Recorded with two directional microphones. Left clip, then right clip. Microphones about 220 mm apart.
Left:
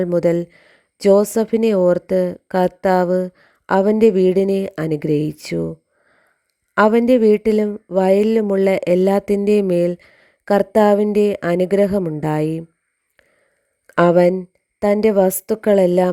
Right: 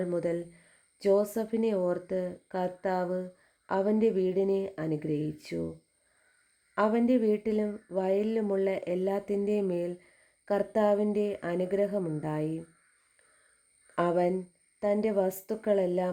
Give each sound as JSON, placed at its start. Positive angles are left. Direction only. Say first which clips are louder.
{"t": 0.0, "sound": "speech", "louder": "left 14 dB", "side_deg": 40}
{"t": 6.7, "sound": "speech", "louder": "left 13 dB", "side_deg": 40}
{"t": 13.8, "sound": "speech", "louder": "left 15 dB", "side_deg": 40}